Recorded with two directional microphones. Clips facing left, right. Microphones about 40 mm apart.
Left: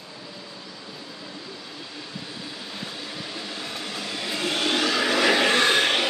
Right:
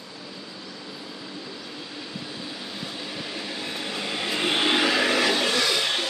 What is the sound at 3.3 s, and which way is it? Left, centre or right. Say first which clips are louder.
Vehicle: right 1 dB; centre.